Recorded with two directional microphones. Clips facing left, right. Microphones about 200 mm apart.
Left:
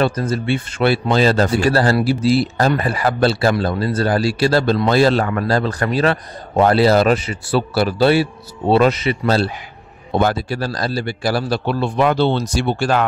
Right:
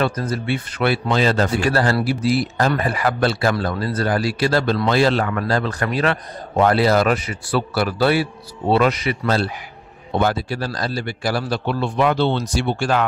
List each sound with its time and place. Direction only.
0.0 s a man's voice: 30° left (ahead or behind)
10.1 s a man's voice: 40° left (ahead or behind)